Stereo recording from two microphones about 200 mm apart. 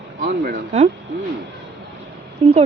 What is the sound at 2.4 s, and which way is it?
Speech, 30° right (ahead or behind).